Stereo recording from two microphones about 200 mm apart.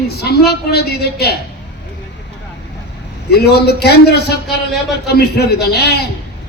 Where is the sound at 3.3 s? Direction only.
55° left (ahead or behind).